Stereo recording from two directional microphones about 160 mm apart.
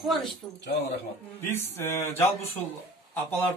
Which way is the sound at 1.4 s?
15° left (ahead or behind).